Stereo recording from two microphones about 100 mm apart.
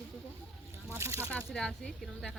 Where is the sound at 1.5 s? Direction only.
5° left (ahead or behind).